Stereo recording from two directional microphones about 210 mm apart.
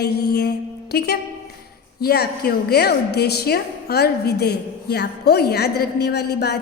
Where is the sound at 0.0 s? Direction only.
50° left (ahead or behind).